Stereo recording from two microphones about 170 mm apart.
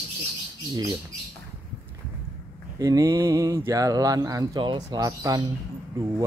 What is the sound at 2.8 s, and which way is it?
Speech, 20° right (ahead or behind).